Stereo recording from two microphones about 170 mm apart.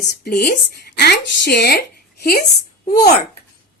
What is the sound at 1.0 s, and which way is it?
Speech, 75° left (ahead or behind).